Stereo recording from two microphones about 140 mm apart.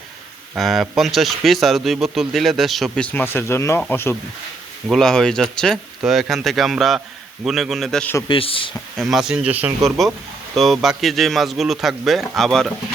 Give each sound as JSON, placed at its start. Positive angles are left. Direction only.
{"t": 0.5, "sound": "speech", "side_deg": 0}
{"t": 4.9, "sound": "speech", "side_deg": 0}
{"t": 8.3, "sound": "speech", "side_deg": 40}
{"t": 9.0, "sound": "speech", "side_deg": 0}